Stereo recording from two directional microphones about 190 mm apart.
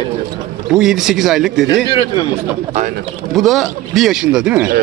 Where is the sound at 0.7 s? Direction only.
Centre (ahead or behind).